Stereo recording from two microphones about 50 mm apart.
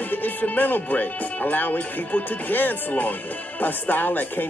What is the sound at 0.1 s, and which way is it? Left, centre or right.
Speech, left.